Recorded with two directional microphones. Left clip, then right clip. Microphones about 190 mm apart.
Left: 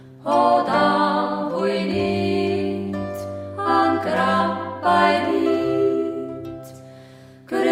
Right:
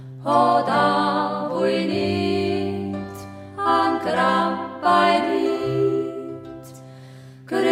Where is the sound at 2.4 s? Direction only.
35° right (ahead or behind).